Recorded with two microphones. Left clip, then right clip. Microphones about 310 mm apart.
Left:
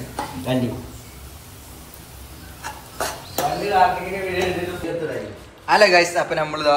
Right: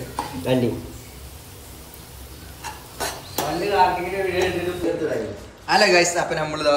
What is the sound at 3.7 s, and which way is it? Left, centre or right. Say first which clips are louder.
Speech: left 1 dB; centre.